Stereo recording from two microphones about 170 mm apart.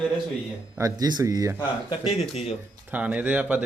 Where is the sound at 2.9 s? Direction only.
10° right (ahead or behind).